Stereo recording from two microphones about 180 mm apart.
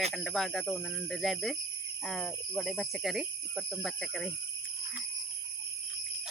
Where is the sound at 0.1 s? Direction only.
Centre (ahead or behind).